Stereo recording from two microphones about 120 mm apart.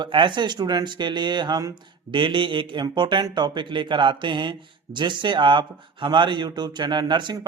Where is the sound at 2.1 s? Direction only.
45° right (ahead or behind).